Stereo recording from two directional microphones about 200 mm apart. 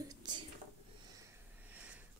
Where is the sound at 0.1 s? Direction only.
20° right (ahead or behind).